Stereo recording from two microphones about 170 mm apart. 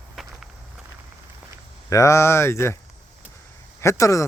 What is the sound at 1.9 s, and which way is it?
Speech, 15° left (ahead or behind).